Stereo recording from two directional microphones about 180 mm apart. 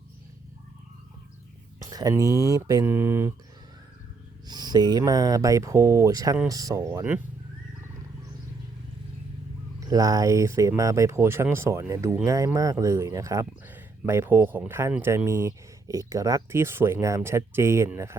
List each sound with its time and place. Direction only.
1.8 s speech: 20° right (ahead or behind)
4.4 s speech: 25° right (ahead or behind)
9.8 s speech: 20° right (ahead or behind)